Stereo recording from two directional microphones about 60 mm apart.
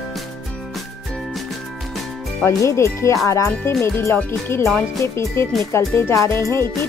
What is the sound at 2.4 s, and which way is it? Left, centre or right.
Music, left.